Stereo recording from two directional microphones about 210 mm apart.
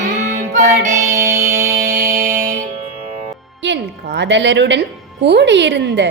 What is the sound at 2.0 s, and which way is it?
Music, 40° right (ahead or behind).